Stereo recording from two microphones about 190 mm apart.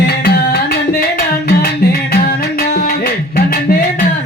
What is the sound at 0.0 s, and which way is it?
Music, 60° left (ahead or behind).